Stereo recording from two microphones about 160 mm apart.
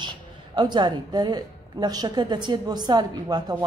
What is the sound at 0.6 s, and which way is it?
A woman's voice, 30° right (ahead or behind).